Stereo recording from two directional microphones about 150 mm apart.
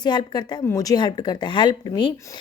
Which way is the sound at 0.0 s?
30° left (ahead or behind).